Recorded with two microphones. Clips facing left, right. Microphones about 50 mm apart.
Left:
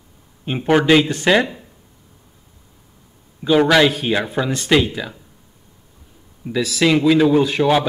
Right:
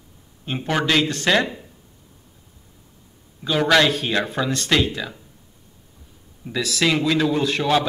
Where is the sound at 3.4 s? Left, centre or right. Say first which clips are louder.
Left 4 dB; centre.